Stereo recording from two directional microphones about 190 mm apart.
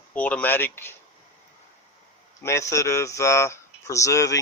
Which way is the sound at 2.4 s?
15° left (ahead or behind).